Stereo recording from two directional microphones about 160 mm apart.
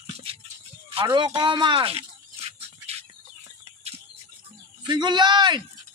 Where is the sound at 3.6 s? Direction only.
40° right (ahead or behind).